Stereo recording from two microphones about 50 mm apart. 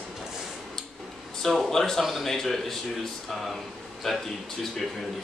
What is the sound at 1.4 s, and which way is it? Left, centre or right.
Speech, centre.